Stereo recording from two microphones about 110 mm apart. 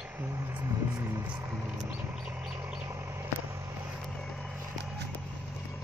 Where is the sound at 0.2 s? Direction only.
25° right (ahead or behind).